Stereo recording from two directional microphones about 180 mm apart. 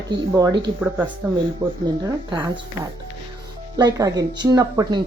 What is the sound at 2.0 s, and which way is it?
Speech, 25° right (ahead or behind).